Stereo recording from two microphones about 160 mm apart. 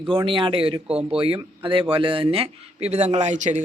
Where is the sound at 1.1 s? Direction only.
35° right (ahead or behind).